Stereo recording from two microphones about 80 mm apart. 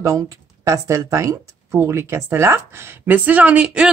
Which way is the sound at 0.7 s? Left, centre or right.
Right.